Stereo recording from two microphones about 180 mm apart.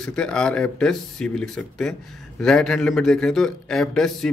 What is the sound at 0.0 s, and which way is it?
A man's voice, 5° left (ahead or behind).